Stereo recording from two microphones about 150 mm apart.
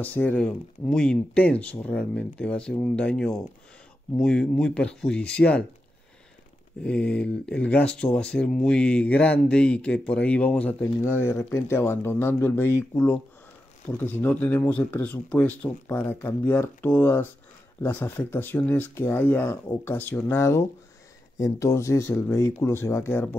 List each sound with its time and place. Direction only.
0.0 s speech: 10° left (ahead or behind)
6.8 s speech: 5° left (ahead or behind)